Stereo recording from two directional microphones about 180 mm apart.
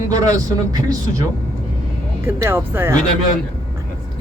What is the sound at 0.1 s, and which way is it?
Speech, 20° right (ahead or behind).